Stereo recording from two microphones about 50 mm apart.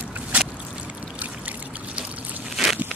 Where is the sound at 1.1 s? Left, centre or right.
Right.